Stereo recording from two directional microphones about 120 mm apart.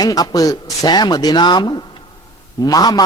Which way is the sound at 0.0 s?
30° left (ahead or behind).